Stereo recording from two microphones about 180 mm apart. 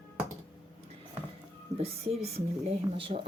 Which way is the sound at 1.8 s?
35° right (ahead or behind).